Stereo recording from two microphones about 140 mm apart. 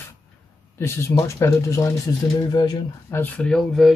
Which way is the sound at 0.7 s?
20° left (ahead or behind).